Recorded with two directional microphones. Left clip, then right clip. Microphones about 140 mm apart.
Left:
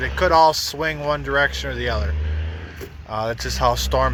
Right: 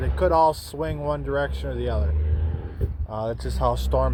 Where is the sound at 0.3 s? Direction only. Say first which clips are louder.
Left 6 dB; centre (ahead or behind).